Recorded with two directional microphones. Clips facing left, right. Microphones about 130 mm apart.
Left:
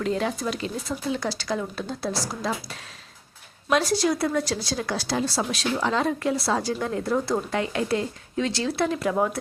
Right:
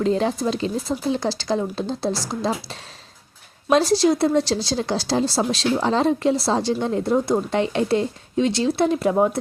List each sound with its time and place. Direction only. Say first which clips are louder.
0.0 s a woman's voice: right 5 dB; 30° right (ahead or behind)